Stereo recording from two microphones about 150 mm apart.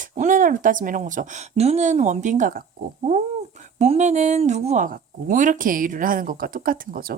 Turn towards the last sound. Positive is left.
turn(degrees=-70)  # may be behind; listen again after turning